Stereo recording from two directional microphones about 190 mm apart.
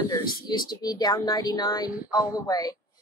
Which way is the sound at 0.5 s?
20° left (ahead or behind).